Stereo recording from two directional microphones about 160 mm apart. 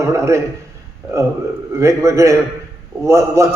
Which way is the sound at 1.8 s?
20° right (ahead or behind).